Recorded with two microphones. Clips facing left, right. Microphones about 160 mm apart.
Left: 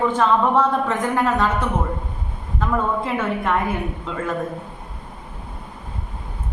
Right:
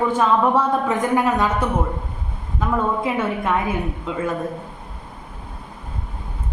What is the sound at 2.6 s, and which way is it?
Speech, 10° right (ahead or behind).